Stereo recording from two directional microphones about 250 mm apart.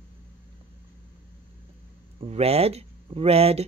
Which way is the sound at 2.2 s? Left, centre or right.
Right.